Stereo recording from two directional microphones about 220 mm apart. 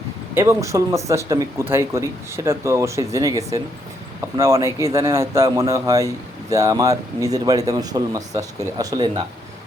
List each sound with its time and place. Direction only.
0.3 s speech: 15° right (ahead or behind)